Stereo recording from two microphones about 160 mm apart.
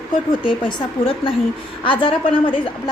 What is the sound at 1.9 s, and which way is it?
Speech, 30° left (ahead or behind).